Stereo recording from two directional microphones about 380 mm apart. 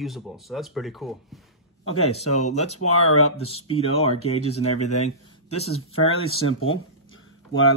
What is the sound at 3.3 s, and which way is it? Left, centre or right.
Speech, centre.